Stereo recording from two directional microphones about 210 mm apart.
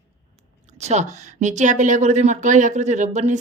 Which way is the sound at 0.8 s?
35° right (ahead or behind).